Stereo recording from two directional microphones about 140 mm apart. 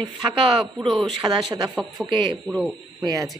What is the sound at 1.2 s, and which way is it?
Speech, 30° right (ahead or behind).